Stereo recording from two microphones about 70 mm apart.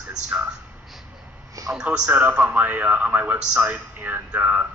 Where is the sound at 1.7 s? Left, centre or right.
Centre.